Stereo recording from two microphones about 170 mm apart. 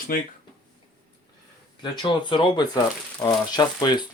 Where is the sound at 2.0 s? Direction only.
30° left (ahead or behind).